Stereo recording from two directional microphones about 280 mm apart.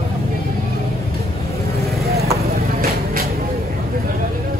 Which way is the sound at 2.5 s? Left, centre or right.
Right.